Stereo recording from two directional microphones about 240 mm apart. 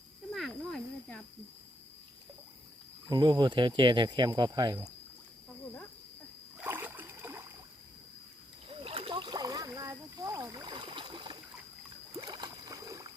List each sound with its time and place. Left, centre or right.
0.3 s snake: centre
3.1 s speech: centre
6.6 s rowboat: centre
8.7 s rowboat: right